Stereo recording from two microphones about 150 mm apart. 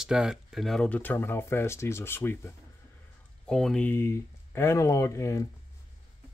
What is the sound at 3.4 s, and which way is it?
Speech, 5° left (ahead or behind).